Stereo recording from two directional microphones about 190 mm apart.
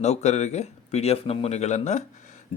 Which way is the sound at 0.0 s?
35° left (ahead or behind).